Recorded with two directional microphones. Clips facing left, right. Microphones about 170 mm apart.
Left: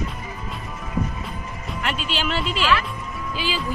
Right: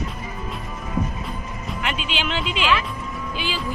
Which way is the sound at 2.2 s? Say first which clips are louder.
Left 1 dB; centre (ahead or behind).